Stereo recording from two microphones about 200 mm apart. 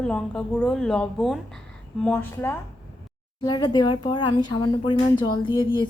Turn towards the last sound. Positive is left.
turn(degrees=25)  # may be behind; listen again after turning